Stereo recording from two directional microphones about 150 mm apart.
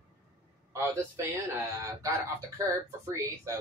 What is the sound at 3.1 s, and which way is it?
Speech, 20° right (ahead or behind).